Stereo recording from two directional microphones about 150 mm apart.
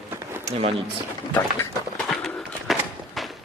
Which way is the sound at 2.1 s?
5° left (ahead or behind).